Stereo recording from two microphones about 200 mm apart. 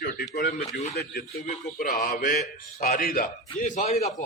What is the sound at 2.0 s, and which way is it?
A man's voice, 40° left (ahead or behind).